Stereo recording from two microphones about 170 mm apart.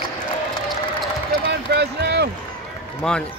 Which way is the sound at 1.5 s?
85° right.